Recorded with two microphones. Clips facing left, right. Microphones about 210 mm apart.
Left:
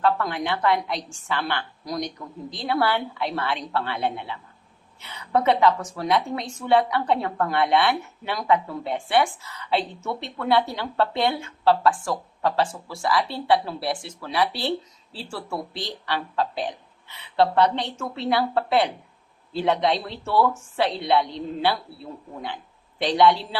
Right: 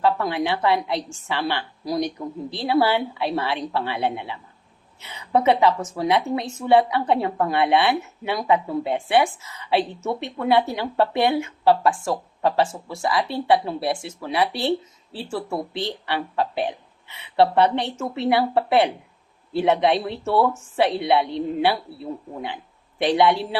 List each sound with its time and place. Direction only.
0.0 s a woman's voice: 20° right (ahead or behind)